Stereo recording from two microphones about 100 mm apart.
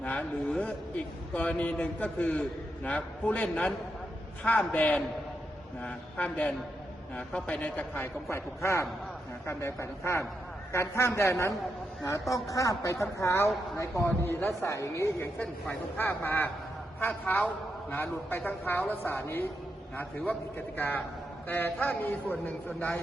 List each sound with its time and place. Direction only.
0.0 s a man's voice: 15° left (ahead or behind)
8.0 s a woman's voice: 25° left (ahead or behind)